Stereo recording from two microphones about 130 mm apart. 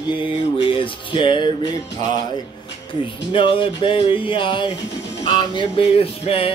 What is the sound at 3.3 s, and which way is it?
Music, 40° left (ahead or behind).